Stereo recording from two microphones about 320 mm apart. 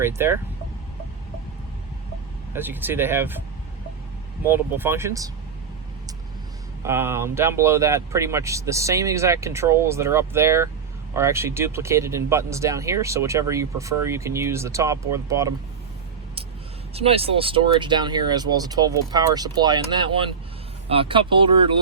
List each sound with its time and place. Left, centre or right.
0.0 s speech: centre
2.5 s speech: centre
4.4 s speech: centre
6.8 s speech: centre
16.9 s speech: centre